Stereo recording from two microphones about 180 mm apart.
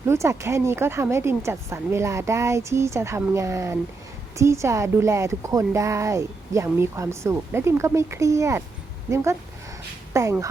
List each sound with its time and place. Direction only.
0.0 s speech: 15° right (ahead or behind)